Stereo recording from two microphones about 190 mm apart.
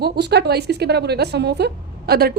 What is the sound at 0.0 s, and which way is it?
A woman's voice, 60° right (ahead or behind).